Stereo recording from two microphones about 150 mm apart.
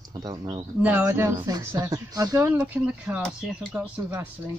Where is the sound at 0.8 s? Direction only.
10° right (ahead or behind).